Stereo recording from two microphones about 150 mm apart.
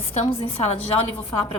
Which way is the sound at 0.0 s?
40° left (ahead or behind).